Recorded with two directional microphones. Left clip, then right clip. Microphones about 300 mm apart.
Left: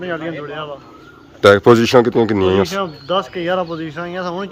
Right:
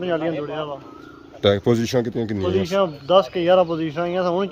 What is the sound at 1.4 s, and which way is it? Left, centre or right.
Speech, centre.